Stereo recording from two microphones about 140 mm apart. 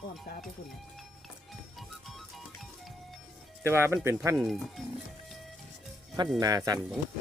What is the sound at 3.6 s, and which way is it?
Speech, 20° right (ahead or behind).